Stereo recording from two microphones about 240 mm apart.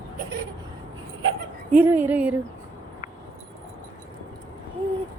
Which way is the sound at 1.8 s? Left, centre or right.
Centre.